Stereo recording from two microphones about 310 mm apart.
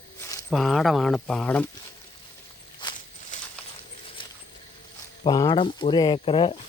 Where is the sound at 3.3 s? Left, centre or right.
Left.